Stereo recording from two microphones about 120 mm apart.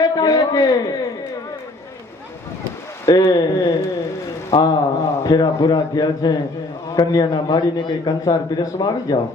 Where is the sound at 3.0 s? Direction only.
30° left (ahead or behind).